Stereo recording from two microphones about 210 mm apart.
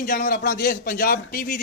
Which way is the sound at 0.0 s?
40° left (ahead or behind).